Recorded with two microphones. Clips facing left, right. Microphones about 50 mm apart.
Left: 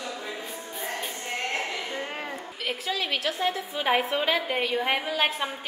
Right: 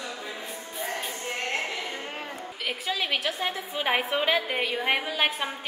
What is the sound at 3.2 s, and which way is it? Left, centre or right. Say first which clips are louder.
A woman's voice: left 2 dB; right.